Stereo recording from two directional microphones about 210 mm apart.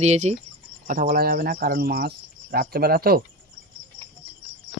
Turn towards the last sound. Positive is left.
turn(degrees=-45)  # may be behind; listen again after turning